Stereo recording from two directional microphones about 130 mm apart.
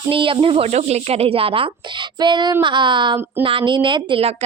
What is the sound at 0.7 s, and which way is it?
Speech, 55° right (ahead or behind).